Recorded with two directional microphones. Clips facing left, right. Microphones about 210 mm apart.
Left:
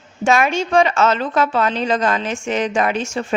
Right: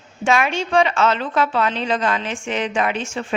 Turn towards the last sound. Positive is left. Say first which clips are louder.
# left 3 dB
turn(degrees=40)  # may be behind; listen again after turning